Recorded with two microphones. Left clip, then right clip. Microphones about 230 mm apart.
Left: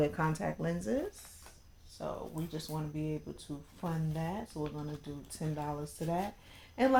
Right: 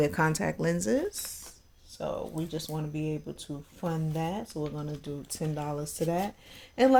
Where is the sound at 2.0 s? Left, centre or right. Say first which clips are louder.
Right 6 dB; right.